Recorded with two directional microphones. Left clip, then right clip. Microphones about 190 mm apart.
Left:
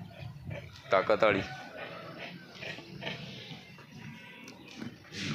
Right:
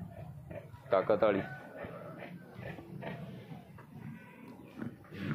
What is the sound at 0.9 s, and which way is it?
Speech, 15° left (ahead or behind).